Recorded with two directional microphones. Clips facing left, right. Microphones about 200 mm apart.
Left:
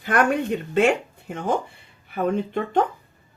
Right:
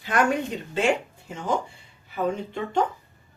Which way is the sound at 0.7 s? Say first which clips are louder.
Left 4 dB; 60° left (ahead or behind).